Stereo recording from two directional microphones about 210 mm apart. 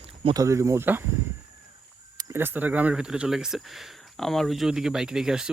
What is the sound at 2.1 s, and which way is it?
Speech, 10° right (ahead or behind).